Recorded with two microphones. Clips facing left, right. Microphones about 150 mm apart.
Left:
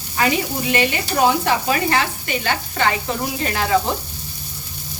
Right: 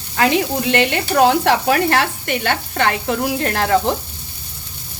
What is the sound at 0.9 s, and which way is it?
Speech, 75° right (ahead or behind).